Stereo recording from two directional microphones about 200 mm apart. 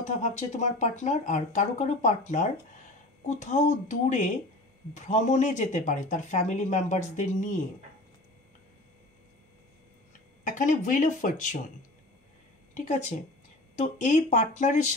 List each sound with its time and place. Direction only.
0.0 s speech: 35° left (ahead or behind)
10.4 s speech: 40° left (ahead or behind)
12.7 s speech: 35° left (ahead or behind)